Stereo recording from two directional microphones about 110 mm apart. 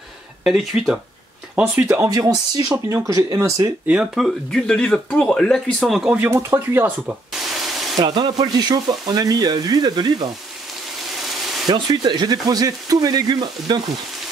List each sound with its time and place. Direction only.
0.4 s speech: 5° right (ahead or behind)
1.9 s speech: 30° right (ahead or behind)
3.8 s speech: 10° right (ahead or behind)
4.5 s speech: 10° left (ahead or behind)
6.1 s speech: 20° right (ahead or behind)
7.3 s a sound: centre (ahead or behind)
8.0 s speech: 45° right (ahead or behind)
11.6 s speech: 40° right (ahead or behind)